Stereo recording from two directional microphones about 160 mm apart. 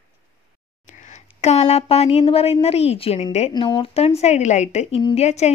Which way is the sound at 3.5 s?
30° left (ahead or behind).